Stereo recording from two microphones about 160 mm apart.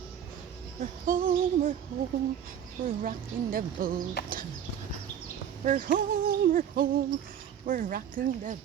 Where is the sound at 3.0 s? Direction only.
60° right (ahead or behind).